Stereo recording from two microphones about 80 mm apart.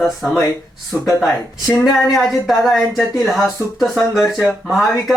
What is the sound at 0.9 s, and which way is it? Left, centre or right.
Speech, left.